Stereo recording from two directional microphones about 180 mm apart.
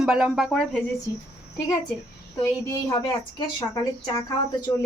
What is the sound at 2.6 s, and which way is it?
Speech, 20° left (ahead or behind).